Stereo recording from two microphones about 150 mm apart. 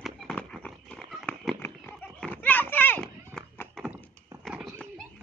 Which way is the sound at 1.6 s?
15° left (ahead or behind).